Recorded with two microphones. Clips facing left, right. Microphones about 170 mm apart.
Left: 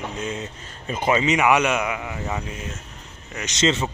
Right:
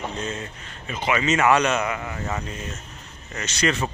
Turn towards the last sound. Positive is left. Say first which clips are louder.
# left 2 dB
turn(degrees=20)  # may be behind; listen again after turning